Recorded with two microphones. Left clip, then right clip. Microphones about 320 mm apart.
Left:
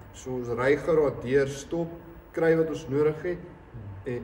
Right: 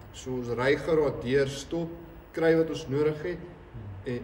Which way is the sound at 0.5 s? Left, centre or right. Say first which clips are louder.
Left 2 dB; centre.